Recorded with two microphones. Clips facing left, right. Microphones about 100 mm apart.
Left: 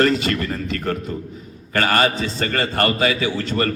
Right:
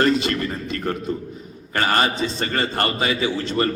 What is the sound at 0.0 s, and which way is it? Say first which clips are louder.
A man's voice: left 1 dB; 20° right (ahead or behind).